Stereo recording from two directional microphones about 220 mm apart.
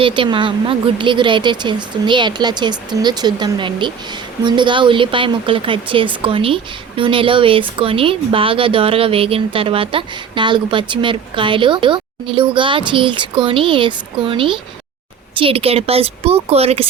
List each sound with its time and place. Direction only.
0.0 s speech: 20° right (ahead or behind)